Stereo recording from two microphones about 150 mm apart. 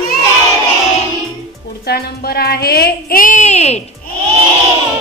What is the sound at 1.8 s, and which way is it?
Speech, 90° left.